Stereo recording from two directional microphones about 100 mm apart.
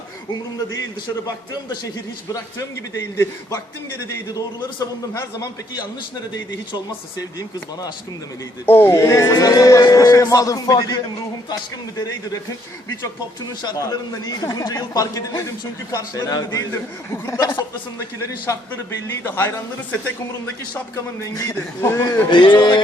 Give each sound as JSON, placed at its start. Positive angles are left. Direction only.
{"t": 2.3, "sound": "a man's voice", "side_deg": 30}
{"t": 7.2, "sound": "a man's voice", "side_deg": 40}
{"t": 8.6, "sound": "a man's voice", "side_deg": 20}
{"t": 13.4, "sound": "a man's voice", "side_deg": 45}
{"t": 20.9, "sound": "a man's voice", "side_deg": 35}
{"t": 22.3, "sound": "speech", "side_deg": 50}